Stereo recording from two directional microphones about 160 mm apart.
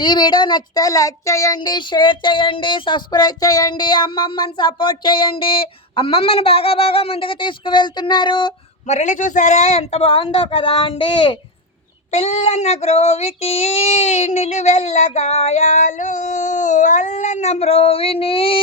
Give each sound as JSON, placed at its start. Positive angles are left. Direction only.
{"t": 0.0, "sound": "speech", "side_deg": 25}
{"t": 8.9, "sound": "a man's voice", "side_deg": 45}
{"t": 12.1, "sound": "child singing", "side_deg": 45}